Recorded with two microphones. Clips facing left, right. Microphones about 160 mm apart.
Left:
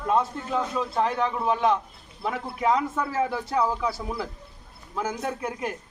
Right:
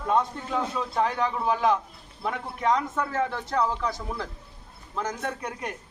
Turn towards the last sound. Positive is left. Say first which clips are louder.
# left 3 dB
turn(degrees=5)  # may be behind; listen again after turning